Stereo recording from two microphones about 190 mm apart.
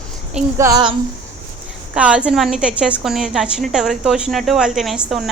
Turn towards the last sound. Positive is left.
turn(degrees=0)  # may be behind; listen again after turning